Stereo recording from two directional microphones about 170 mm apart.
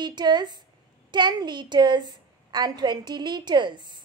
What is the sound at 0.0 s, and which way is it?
A woman's voice, 25° right (ahead or behind).